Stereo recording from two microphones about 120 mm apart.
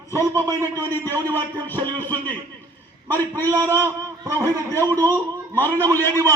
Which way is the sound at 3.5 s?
20° right (ahead or behind).